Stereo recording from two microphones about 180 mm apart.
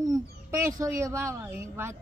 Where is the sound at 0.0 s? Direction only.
20° right (ahead or behind).